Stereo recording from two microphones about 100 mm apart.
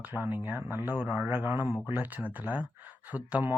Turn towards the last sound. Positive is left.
turn(degrees=-15)  # may be behind; listen again after turning